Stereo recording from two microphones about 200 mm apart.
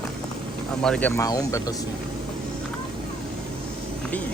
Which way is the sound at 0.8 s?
5° left (ahead or behind).